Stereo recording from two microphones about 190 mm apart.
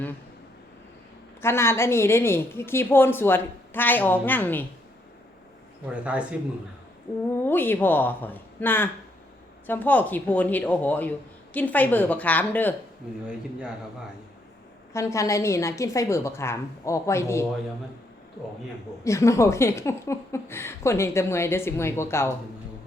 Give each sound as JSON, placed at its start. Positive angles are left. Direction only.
{"t": 1.4, "sound": "a woman's voice", "side_deg": 15}
{"t": 5.9, "sound": "speech", "side_deg": -5}
{"t": 7.4, "sound": "a woman's voice", "side_deg": 10}
{"t": 14.9, "sound": "a woman's voice", "side_deg": 15}
{"t": 19.0, "sound": "a woman's voice", "side_deg": 15}